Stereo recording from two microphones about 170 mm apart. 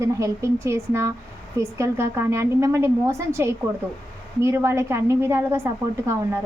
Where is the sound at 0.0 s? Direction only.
15° right (ahead or behind).